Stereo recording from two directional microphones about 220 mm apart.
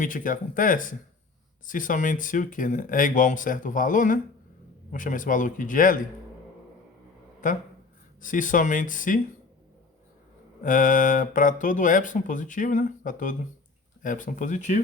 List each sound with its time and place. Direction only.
0.0 s speech: 40° left (ahead or behind)
7.4 s speech: 35° left (ahead or behind)
10.6 s speech: 35° left (ahead or behind)